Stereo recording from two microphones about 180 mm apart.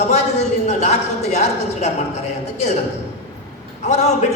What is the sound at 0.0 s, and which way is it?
A man's voice, 40° left (ahead or behind).